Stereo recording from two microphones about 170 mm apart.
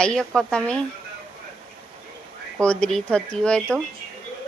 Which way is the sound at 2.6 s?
5° left (ahead or behind).